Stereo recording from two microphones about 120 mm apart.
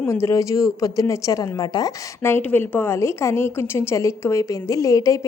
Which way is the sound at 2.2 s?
15° left (ahead or behind).